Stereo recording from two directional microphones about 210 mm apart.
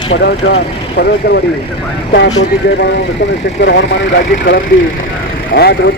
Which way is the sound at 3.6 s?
60° left (ahead or behind).